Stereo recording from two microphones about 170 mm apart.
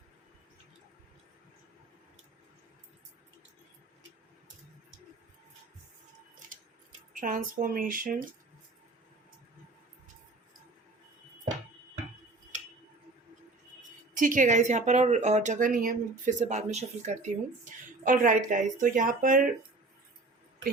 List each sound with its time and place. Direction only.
7.1 s speech: 50° right (ahead or behind)
14.1 s a woman's voice: 50° right (ahead or behind)